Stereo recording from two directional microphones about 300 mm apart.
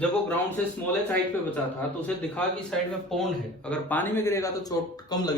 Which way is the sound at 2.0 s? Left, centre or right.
Centre.